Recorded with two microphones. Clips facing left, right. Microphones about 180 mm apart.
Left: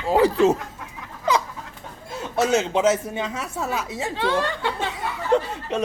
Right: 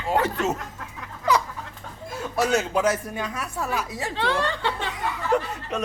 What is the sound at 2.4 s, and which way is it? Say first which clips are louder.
Speech: left 2 dB; 25° left (ahead or behind).